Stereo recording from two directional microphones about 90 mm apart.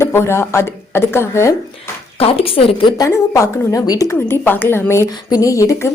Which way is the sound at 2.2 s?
90° left.